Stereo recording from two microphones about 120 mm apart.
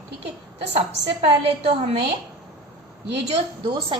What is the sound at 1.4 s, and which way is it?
Speech, 55° right (ahead or behind).